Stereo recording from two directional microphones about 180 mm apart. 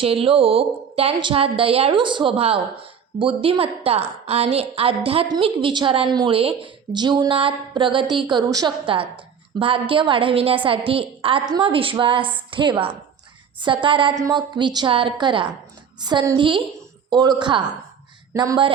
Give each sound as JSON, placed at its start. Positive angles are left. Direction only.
{"t": 0.0, "sound": "a woman's voice", "side_deg": -30}